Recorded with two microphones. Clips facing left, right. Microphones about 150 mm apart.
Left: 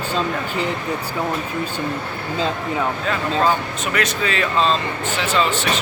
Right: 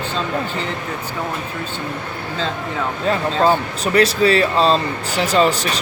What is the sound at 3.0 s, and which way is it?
Speech, 35° right (ahead or behind).